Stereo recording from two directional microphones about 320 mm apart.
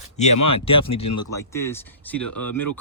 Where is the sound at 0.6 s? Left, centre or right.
Centre.